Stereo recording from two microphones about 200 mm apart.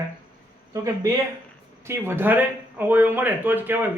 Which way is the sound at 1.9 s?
10° right (ahead or behind).